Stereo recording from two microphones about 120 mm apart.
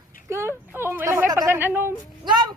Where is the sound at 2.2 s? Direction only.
35° right (ahead or behind).